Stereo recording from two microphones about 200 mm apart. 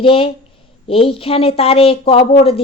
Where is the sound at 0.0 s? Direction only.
25° left (ahead or behind).